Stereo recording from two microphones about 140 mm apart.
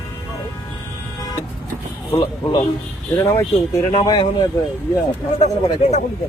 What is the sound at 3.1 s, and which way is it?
Speech, 20° left (ahead or behind).